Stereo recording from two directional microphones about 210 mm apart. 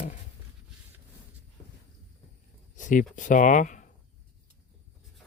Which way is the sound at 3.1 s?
40° left (ahead or behind).